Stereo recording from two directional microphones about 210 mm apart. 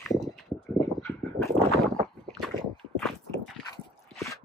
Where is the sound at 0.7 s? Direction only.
10° left (ahead or behind).